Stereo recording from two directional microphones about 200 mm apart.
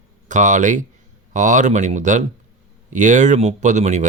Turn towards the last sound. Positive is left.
turn(degrees=-35)  # may be behind; listen again after turning